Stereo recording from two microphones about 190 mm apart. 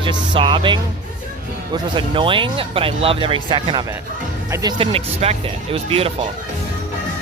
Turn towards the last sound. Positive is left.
turn(degrees=-30)  # may be behind; listen again after turning